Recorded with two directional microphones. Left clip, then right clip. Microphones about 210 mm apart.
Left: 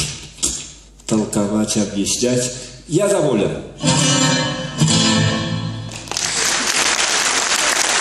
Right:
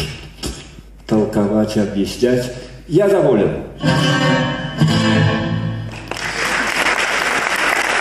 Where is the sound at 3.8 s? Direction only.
40° left (ahead or behind).